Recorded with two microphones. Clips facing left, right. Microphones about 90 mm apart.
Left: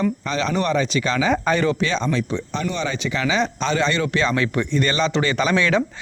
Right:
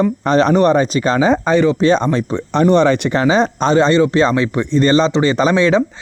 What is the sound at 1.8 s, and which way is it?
Speech, 45° right (ahead or behind).